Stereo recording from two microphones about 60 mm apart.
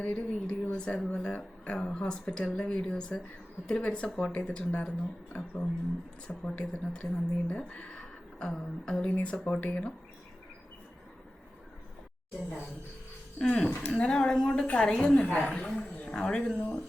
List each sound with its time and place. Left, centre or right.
0.0 s speech: centre
13.4 s speech: centre
15.0 s speech: left